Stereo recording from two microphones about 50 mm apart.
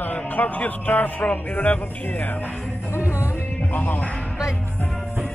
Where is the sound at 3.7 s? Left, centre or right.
Left.